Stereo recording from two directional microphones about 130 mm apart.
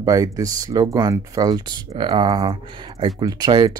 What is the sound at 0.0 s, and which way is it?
Speech, 25° right (ahead or behind).